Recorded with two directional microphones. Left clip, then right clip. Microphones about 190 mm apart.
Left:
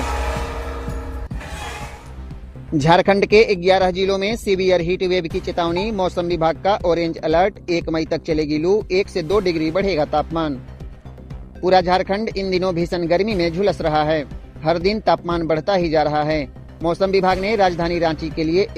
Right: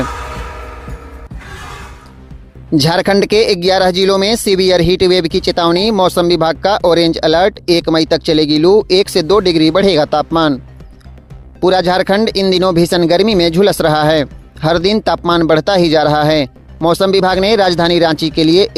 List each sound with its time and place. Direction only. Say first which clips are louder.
2.8 s speech: right 1 dB; 30° right (ahead or behind)
11.6 s speech: right 4 dB; 35° right (ahead or behind)